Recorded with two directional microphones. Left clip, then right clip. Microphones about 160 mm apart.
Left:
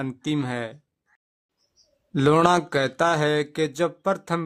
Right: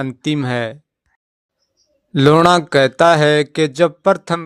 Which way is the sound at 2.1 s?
30° right (ahead or behind).